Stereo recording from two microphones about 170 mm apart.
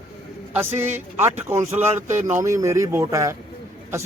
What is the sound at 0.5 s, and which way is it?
Speech, 15° right (ahead or behind).